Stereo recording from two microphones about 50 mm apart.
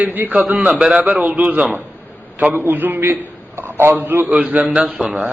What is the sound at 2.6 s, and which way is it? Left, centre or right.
Speech, right.